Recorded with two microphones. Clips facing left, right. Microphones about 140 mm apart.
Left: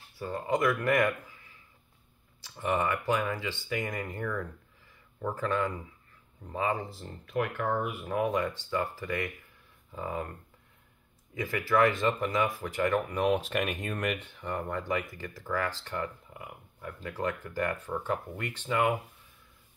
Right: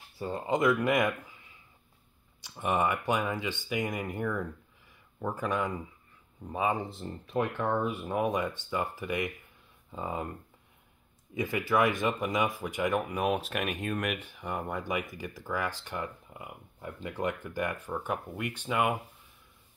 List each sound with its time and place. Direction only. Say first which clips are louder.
0.2 s speech: right 1 dB; 25° right (ahead or behind)
2.4 s speech: right 1 dB; 20° right (ahead or behind)
11.3 s speech: left 1 dB; 15° right (ahead or behind)